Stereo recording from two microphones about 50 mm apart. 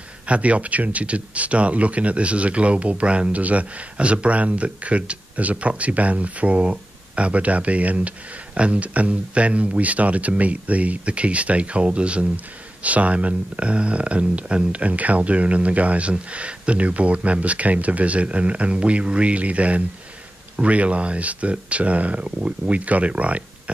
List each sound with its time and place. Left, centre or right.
0.3 s speech: right